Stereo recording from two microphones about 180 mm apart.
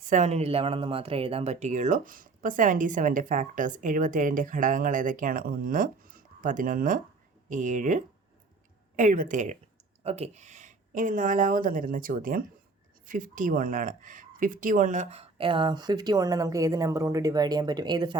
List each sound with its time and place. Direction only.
0.1 s speech: 40° right (ahead or behind); by 18.2 s 25° right (ahead or behind)